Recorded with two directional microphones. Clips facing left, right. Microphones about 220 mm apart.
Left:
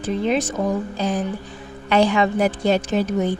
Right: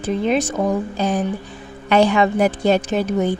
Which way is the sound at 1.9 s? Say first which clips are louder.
Right 2 dB; 50° right (ahead or behind).